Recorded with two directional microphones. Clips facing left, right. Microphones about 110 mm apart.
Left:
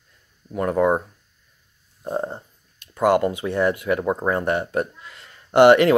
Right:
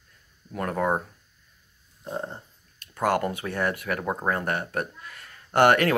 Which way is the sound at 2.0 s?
40° left (ahead or behind).